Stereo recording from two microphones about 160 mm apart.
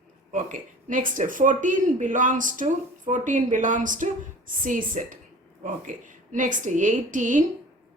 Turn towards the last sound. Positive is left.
turn(degrees=-55)  # may be behind; listen again after turning